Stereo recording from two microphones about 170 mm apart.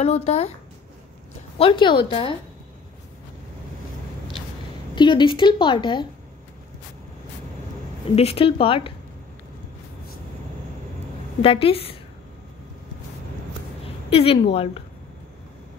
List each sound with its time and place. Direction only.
0.0 s speech: 40° left (ahead or behind)
1.6 s a woman's voice: 30° left (ahead or behind)
4.9 s a woman's voice: 30° left (ahead or behind)
8.2 s speech: 35° left (ahead or behind)
11.4 s speech: 35° left (ahead or behind)
13.8 s a woman's voice: 35° left (ahead or behind)